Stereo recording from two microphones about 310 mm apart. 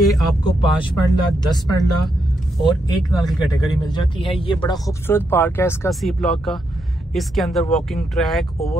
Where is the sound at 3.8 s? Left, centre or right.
Centre.